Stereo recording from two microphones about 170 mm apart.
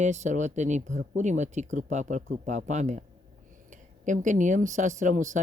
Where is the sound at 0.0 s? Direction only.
45° right (ahead or behind).